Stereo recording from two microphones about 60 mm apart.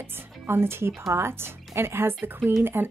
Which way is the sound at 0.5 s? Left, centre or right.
Right.